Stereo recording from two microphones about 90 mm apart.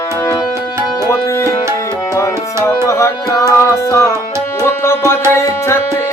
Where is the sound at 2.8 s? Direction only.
40° left (ahead or behind).